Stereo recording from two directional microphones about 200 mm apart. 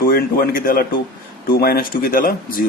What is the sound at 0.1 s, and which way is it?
Speech, 50° left (ahead or behind).